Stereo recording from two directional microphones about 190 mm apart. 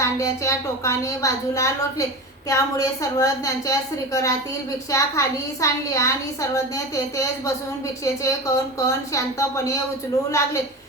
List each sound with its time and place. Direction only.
0.0 s a woman's voice: 15° left (ahead or behind)